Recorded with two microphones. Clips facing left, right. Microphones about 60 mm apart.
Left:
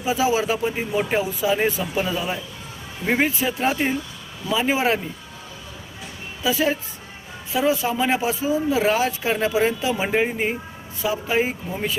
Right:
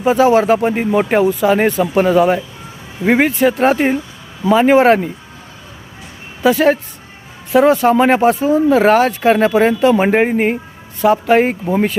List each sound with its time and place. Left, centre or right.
0.0 s speech: right
6.4 s speech: right
11.0 s speech: right